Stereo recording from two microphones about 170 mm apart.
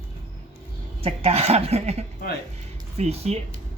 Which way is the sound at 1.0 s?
35° right (ahead or behind).